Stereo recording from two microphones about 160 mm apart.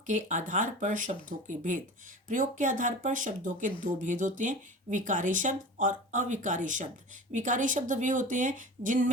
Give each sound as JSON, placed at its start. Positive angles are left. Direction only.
{"t": 0.0, "sound": "speech", "side_deg": -50}